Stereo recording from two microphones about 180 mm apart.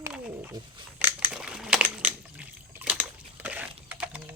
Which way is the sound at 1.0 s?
5° right (ahead or behind).